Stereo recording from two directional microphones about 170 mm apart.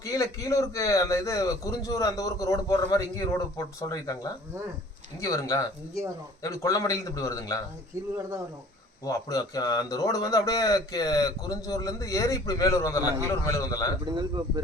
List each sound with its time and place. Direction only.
0.0 s a man's voice: 20° left (ahead or behind)
9.0 s a man's voice: 20° left (ahead or behind)
13.0 s a man's voice: 10° right (ahead or behind)
13.2 s a man's voice: 20° left (ahead or behind)
14.0 s speech: 25° right (ahead or behind)